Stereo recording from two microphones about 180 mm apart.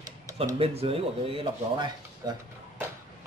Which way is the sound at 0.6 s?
30° right (ahead or behind).